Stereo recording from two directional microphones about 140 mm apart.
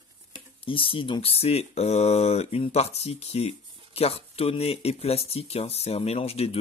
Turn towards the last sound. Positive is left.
turn(degrees=45)  # may be behind; listen again after turning